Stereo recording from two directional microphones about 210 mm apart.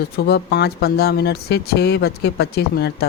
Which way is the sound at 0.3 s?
50° left (ahead or behind).